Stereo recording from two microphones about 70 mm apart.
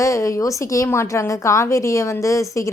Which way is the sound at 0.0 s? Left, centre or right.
Left.